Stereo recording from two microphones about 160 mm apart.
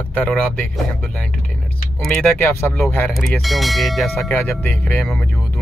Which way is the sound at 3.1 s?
Centre (ahead or behind).